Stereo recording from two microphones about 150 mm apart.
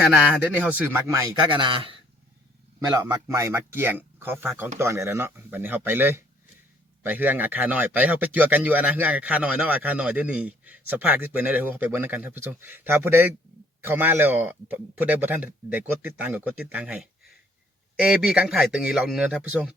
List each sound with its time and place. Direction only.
0.0 s speech: 10° right (ahead or behind)
1.5 s speech: 35° right (ahead or behind)
2.9 s speech: 20° right (ahead or behind)